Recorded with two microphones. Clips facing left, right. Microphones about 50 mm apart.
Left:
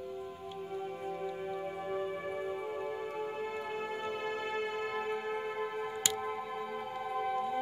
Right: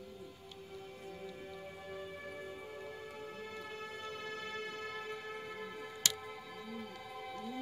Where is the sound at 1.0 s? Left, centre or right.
Left.